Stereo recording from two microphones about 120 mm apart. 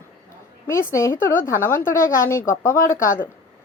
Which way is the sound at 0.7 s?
20° left (ahead or behind).